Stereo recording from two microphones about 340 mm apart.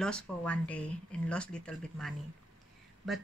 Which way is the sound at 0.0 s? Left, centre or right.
Centre.